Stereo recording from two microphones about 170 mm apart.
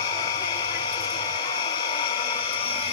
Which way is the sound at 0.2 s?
25° left (ahead or behind).